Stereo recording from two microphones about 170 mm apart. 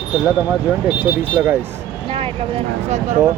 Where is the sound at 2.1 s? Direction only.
35° right (ahead or behind).